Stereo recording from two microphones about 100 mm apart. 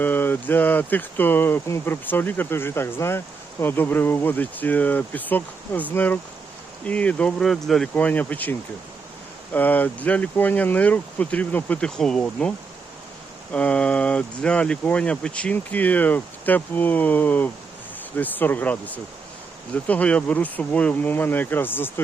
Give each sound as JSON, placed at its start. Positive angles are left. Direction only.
{"t": 0.0, "sound": "speech", "side_deg": 20}
{"t": 7.9, "sound": "speech", "side_deg": 15}